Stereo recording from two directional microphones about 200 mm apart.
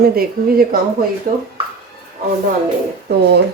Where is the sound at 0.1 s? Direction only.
50° right (ahead or behind).